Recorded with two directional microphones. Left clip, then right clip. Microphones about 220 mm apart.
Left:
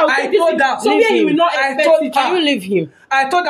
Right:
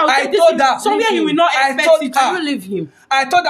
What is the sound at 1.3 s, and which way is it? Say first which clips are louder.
Speech: right 1 dB; 30° right (ahead or behind).